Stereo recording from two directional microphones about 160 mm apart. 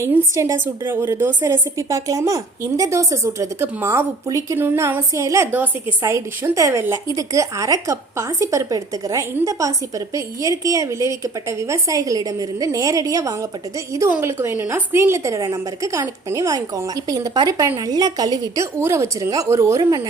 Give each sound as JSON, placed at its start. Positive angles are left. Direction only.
{"t": 0.0, "sound": "a woman's voice", "side_deg": -15}